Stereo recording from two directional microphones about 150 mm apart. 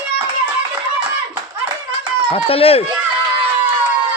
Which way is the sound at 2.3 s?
40° left (ahead or behind).